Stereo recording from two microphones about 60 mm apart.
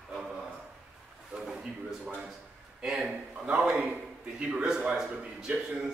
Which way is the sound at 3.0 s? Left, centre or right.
Right.